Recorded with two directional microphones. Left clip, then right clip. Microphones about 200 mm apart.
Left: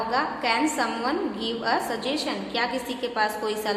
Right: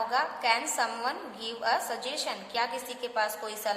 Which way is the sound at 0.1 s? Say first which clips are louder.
Left 4 dB; 30° right (ahead or behind).